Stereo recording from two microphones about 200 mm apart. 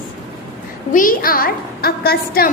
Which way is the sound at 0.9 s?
45° left (ahead or behind).